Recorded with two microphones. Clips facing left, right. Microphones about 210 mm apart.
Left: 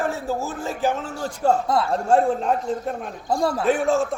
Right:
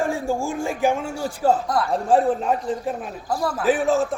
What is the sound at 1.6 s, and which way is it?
Speech, 25° left (ahead or behind).